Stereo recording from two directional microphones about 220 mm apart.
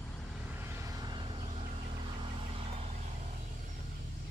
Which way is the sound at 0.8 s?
15° right (ahead or behind).